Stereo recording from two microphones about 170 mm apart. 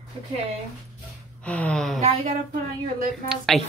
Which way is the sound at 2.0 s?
40° right (ahead or behind).